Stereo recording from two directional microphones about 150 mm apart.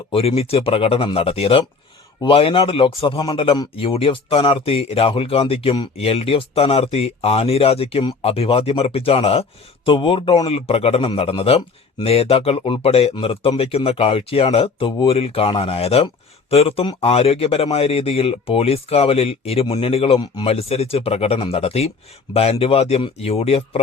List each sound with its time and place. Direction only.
0.1 s speech: 40° left (ahead or behind)